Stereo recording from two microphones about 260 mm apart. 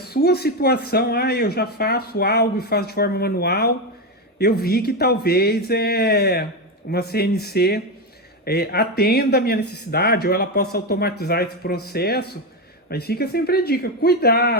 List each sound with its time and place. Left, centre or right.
0.0 s speech: left